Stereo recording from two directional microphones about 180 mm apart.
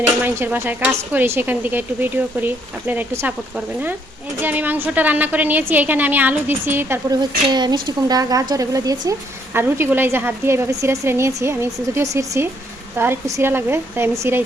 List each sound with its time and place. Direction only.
0.2 s speech: 10° right (ahead or behind)
7.5 s speech: 25° right (ahead or behind)